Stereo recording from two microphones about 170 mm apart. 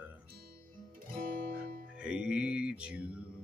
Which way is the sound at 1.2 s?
55° right (ahead or behind).